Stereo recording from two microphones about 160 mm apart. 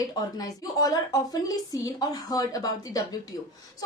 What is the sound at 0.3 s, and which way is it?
A woman's voice, 25° left (ahead or behind).